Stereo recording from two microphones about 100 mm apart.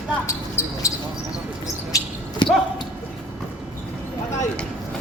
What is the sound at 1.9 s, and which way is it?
Basketball bounce, 35° left (ahead or behind).